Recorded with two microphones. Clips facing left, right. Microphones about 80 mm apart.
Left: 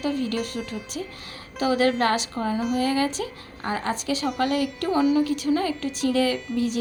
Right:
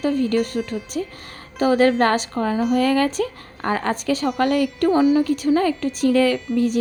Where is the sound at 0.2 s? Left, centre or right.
Right.